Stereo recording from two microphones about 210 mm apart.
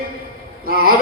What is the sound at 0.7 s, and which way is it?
Speech, 45° right (ahead or behind).